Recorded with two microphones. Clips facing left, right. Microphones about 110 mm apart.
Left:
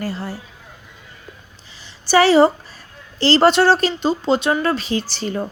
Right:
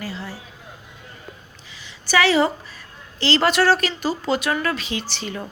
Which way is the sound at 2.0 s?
35° left (ahead or behind).